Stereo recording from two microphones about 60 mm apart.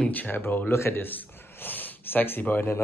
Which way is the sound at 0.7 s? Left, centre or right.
Left.